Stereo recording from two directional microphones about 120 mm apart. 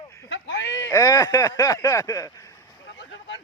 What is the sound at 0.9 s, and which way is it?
Speech, 25° left (ahead or behind).